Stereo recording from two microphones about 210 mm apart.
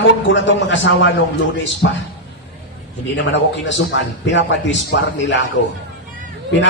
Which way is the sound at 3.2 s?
60° left (ahead or behind).